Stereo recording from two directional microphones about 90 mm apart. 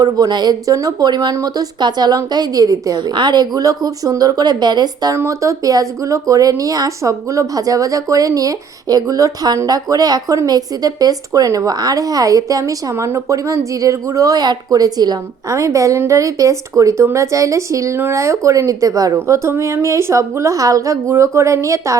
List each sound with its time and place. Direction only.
0.0 s speech: 50° right (ahead or behind)
5.1 s speech: 30° right (ahead or behind); by 15.5 s 50° right (ahead or behind)
15.5 s speech: 35° right (ahead or behind)